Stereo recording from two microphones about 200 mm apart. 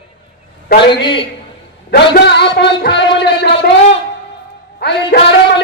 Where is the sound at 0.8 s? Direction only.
25° left (ahead or behind).